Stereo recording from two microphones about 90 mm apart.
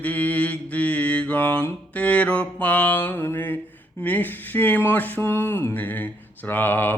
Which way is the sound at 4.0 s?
20° left (ahead or behind).